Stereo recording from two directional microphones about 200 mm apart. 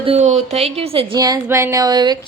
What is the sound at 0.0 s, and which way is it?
A woman's voice, 35° right (ahead or behind).